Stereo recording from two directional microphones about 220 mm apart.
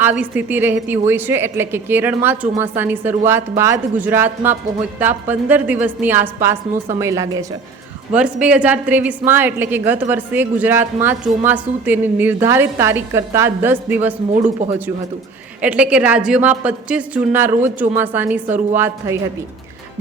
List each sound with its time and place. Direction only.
0.0 s a woman's voice: 5° right (ahead or behind)
14.4 s speech: 30° right (ahead or behind)
15.6 s a woman's voice: 5° right (ahead or behind)